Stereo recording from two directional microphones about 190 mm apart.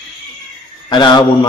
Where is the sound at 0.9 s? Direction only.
25° left (ahead or behind).